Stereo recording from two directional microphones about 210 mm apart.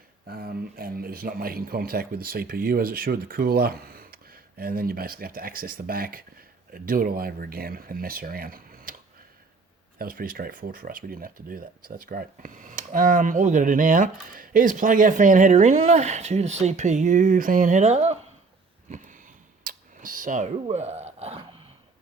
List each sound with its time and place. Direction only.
0.3 s speech: 45° right (ahead or behind)
10.0 s speech: 45° right (ahead or behind)
18.9 s a sound: 35° right (ahead or behind)